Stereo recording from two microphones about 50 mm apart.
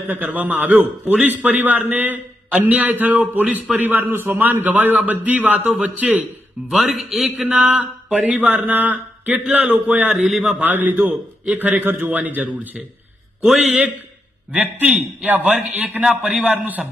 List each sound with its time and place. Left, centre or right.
0.1 s mantra: right
5.7 s a man's voice: right
6.7 s a man's voice: centre
7.4 s mantra: right
10.2 s a man's voice: centre
10.6 s mantra: right
13.4 s a man's voice: centre
14.5 s mantra: right
16.2 s a man's voice: centre
16.5 s mantra: right